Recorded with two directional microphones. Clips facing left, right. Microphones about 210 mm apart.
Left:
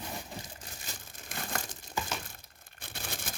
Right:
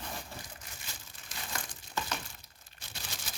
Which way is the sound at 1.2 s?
55° left (ahead or behind).